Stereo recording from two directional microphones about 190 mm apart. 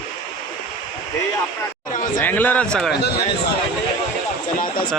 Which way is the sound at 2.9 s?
60° left (ahead or behind).